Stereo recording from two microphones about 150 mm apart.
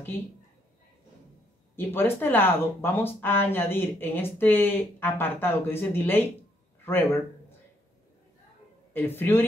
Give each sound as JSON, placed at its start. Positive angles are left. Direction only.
{"t": 1.8, "sound": "speech", "side_deg": 15}
{"t": 8.9, "sound": "speech", "side_deg": 15}